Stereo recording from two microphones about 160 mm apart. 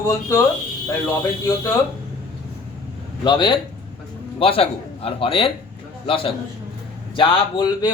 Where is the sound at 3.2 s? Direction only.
30° left (ahead or behind).